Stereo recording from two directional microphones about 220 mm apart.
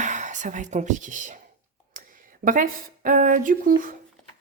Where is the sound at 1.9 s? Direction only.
40° right (ahead or behind).